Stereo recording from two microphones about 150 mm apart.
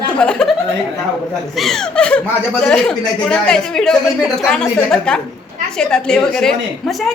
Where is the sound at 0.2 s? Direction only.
5° left (ahead or behind).